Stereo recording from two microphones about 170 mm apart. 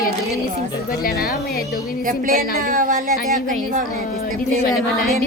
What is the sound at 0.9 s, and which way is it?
Speech, 60° left (ahead or behind).